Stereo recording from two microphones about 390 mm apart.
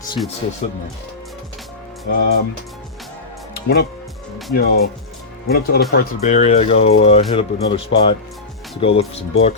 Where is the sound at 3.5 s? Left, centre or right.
Left.